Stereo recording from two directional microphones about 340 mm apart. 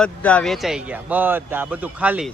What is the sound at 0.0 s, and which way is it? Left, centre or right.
Speech, centre.